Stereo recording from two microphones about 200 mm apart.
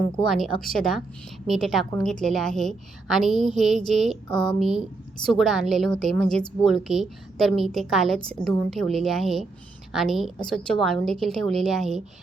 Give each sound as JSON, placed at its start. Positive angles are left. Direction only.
{"t": 0.3, "sound": "a woman's voice", "side_deg": 0}
{"t": 4.3, "sound": "a woman's voice", "side_deg": 20}
{"t": 5.3, "sound": "a woman's voice", "side_deg": 0}